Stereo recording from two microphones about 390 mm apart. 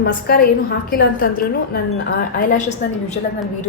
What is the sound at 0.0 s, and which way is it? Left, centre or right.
A woman's voice, left.